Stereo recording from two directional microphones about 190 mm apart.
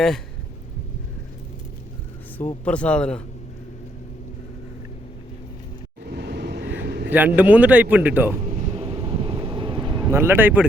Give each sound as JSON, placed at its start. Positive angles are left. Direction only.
{"t": 2.6, "sound": "speech", "side_deg": 5}
{"t": 6.1, "sound": "vehicle", "side_deg": -60}
{"t": 7.1, "sound": "a man's voice", "side_deg": -10}
{"t": 8.5, "sound": "vehicle", "side_deg": -30}